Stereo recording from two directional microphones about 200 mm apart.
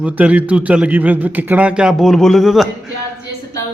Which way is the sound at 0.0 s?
5° right (ahead or behind).